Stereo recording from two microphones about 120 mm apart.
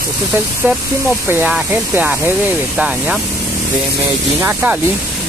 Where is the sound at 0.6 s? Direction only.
15° right (ahead or behind).